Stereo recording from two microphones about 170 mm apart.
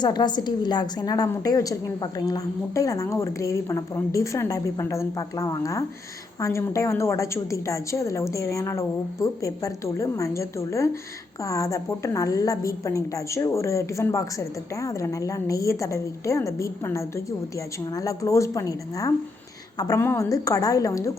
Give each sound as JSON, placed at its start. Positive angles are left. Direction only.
{"t": 0.0, "sound": "a woman's voice", "side_deg": 25}